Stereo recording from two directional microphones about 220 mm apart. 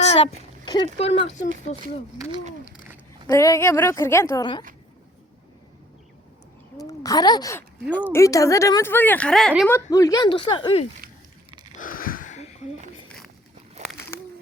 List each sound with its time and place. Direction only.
0.0 s a sound: 25° left (ahead or behind)
1.7 s speech: 30° left (ahead or behind)
3.2 s speech: 15° left (ahead or behind)
6.8 s speech: 15° left (ahead or behind)
11.8 s a sound: 40° left (ahead or behind)
13.1 s boat: centre (ahead or behind)